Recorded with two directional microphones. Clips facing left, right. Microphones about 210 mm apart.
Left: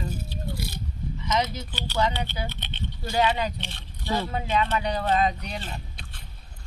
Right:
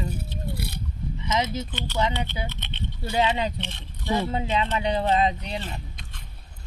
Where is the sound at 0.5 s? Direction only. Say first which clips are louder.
Right 1 dB; 60° right (ahead or behind).